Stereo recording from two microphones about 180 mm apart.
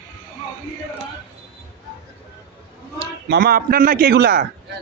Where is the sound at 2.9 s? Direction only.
60° right (ahead or behind).